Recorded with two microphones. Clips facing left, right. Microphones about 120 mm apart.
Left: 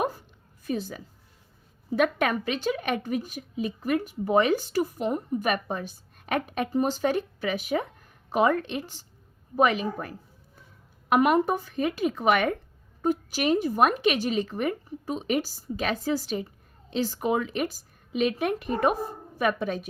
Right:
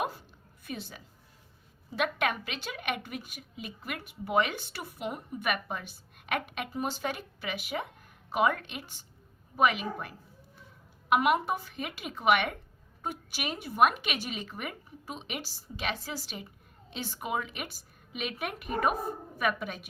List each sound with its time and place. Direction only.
0.6 s a woman's voice: 40° left (ahead or behind)